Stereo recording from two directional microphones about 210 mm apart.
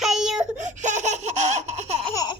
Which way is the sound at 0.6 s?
35° right (ahead or behind).